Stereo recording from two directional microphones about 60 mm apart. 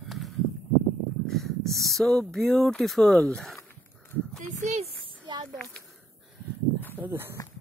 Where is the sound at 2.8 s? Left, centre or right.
Centre.